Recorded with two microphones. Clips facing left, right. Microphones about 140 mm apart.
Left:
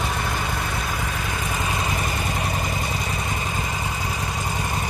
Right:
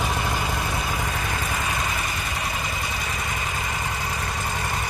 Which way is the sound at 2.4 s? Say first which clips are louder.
Left 3 dB; 30° left (ahead or behind).